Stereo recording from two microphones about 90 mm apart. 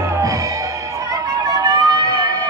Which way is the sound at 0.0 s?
35° right (ahead or behind).